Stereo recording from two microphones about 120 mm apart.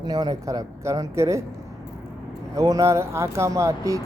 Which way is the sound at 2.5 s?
30° right (ahead or behind).